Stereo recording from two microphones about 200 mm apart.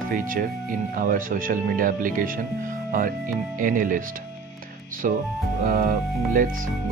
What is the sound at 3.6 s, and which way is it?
Speech, 40° right (ahead or behind).